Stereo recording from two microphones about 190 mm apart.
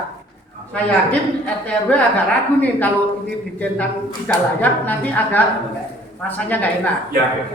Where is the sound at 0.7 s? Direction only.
5° left (ahead or behind).